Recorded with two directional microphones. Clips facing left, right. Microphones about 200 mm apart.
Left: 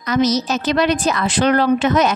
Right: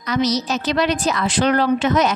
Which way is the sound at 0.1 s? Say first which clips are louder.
Left 3 dB; 50° left (ahead or behind).